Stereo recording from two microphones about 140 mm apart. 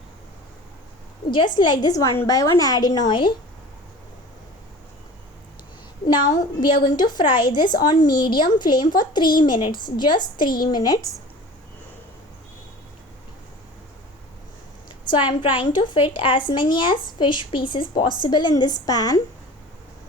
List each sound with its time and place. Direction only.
1.5 s a woman's voice: 30° left (ahead or behind)
6.1 s a woman's voice: 30° left (ahead or behind)
15.3 s a woman's voice: 35° left (ahead or behind)